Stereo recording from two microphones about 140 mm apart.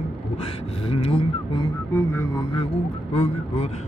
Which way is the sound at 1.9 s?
20° left (ahead or behind).